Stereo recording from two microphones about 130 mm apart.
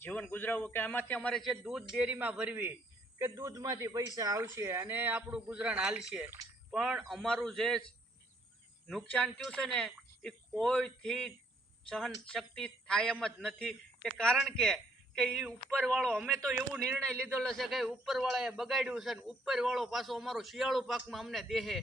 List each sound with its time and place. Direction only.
0.0 s a man's voice: 15° left (ahead or behind)
2.0 s a man's voice: 10° right (ahead or behind); by 16.1 s 5° left (ahead or behind)
16.1 s a man's voice: 10° right (ahead or behind)
17.0 s a man's voice: 5° left (ahead or behind)